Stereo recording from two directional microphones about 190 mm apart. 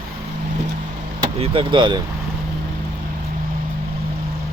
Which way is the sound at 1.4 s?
25° right (ahead or behind).